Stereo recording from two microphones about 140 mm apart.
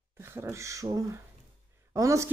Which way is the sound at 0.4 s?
20° right (ahead or behind).